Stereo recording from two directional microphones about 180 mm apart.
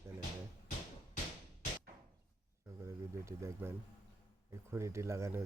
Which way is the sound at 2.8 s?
15° right (ahead or behind).